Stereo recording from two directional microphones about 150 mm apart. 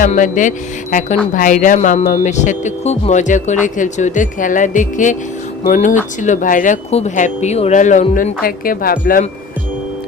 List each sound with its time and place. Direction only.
0.1 s speech: 55° left (ahead or behind)
6.9 s speech: 50° left (ahead or behind)
8.4 s speech: 75° left (ahead or behind)